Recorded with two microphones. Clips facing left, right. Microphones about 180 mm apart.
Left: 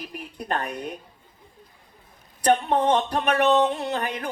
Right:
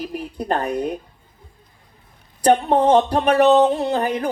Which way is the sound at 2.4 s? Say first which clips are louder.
Right 5 dB; 35° right (ahead or behind).